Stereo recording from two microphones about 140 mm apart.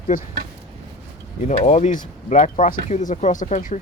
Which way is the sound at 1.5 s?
55° left (ahead or behind).